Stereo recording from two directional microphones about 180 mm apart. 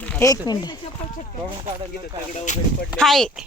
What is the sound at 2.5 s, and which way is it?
Speech, 45° left (ahead or behind).